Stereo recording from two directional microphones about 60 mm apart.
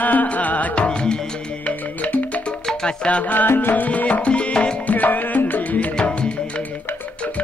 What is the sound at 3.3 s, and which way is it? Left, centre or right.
Music, left.